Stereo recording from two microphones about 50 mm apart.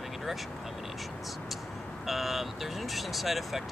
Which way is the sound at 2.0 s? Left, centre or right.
Centre.